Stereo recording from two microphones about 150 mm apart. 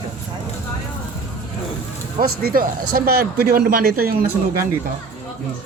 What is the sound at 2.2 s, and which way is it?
A man's voice, 80° right.